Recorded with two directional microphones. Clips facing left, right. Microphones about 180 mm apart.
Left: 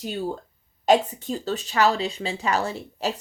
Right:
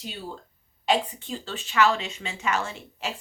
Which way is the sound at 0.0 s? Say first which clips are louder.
Left 9 dB; 45° left (ahead or behind).